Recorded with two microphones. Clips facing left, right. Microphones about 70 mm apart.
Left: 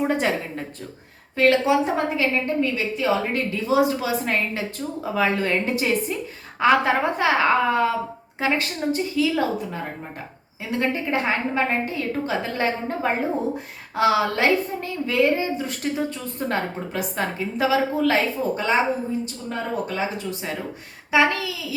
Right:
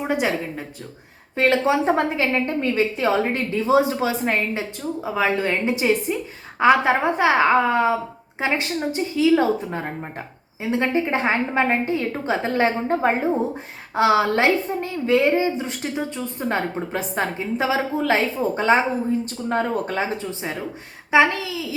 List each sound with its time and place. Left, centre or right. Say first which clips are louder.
0.0 s speech: even; centre
1.4 s a woman's voice: left 1 dB; right
19.2 s speech: right 6 dB; right
21.1 s a woman's voice: right 2 dB; right